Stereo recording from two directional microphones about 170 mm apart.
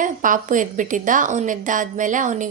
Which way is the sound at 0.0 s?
50° right (ahead or behind).